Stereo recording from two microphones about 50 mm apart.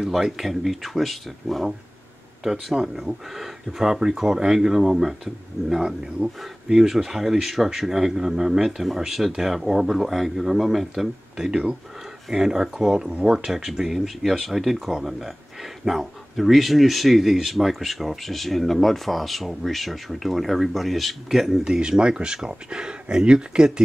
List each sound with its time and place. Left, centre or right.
0.0 s speech: centre
11.4 s speech: centre
21.6 s speech: centre